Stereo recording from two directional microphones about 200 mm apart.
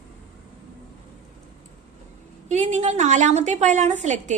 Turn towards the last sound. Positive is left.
turn(degrees=-35)  # may be behind; listen again after turning